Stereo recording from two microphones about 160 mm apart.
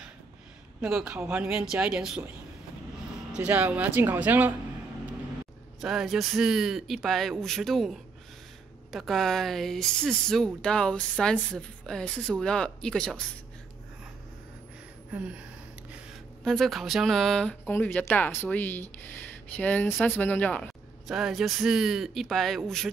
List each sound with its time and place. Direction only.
0.7 s speech: 5° right (ahead or behind)
3.3 s speech: 10° right (ahead or behind)
5.8 s speech: 5° right (ahead or behind)
15.1 s speech: 5° right (ahead or behind)
16.4 s speech: centre (ahead or behind)
21.1 s speech: 5° right (ahead or behind)